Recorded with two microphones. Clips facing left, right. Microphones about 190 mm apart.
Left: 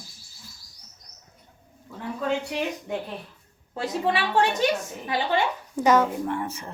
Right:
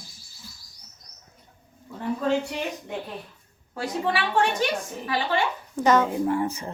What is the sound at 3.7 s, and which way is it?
A woman's voice, 25° left (ahead or behind).